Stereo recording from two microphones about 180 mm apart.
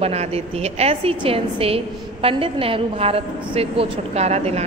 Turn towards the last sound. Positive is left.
turn(degrees=-35)  # may be behind; listen again after turning